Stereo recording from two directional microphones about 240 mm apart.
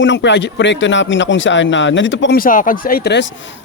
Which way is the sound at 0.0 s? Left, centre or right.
Left.